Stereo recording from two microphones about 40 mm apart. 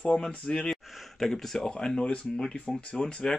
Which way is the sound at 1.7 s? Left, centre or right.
Left.